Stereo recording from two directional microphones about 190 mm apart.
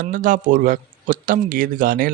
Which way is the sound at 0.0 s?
45° right (ahead or behind).